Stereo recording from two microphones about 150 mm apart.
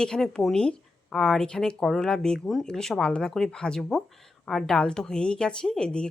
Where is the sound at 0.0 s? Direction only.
5° left (ahead or behind).